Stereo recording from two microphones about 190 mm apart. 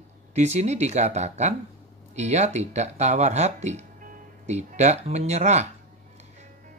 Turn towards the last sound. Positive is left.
turn(degrees=-35)  # may be behind; listen again after turning